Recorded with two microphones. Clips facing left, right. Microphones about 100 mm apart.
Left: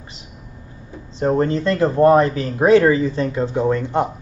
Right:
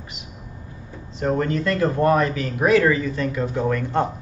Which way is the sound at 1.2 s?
30° left (ahead or behind).